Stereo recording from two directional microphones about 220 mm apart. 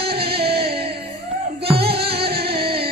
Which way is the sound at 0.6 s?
25° right (ahead or behind).